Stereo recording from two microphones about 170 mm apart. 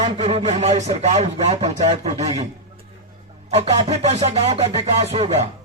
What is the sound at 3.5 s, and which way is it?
A man's voice, 40° right (ahead or behind).